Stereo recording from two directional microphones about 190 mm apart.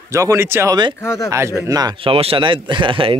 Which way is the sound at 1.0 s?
15° left (ahead or behind).